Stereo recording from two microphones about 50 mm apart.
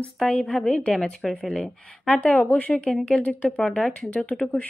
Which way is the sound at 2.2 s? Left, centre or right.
Left.